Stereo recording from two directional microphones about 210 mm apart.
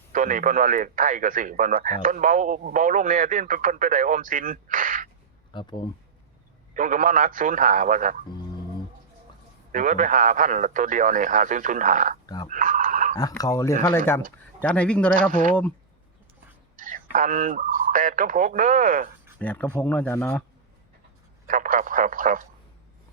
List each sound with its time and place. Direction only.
0.1 s speech: 40° right (ahead or behind)
5.5 s speech: 20° left (ahead or behind)
6.7 s speech: 40° right (ahead or behind)
9.7 s speech: 40° right (ahead or behind)
12.2 s speech: 20° left (ahead or behind)
12.5 s a sound: 40° right (ahead or behind)
13.1 s speech: 15° left (ahead or behind)
15.3 s speech: 40° right (ahead or behind)
16.7 s speech: 40° right (ahead or behind)
19.4 s speech: 5° left (ahead or behind)
21.4 s speech: 40° right (ahead or behind)